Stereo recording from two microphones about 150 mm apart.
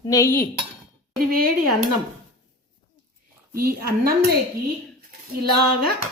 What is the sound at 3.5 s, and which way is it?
Speech, 85° right.